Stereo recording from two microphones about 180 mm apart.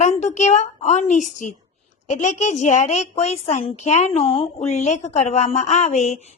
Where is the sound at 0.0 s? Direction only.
40° left (ahead or behind).